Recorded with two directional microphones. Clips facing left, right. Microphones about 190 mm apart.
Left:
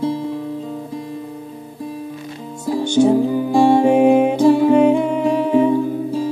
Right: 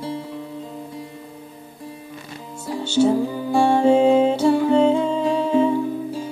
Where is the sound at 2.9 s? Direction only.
15° left (ahead or behind).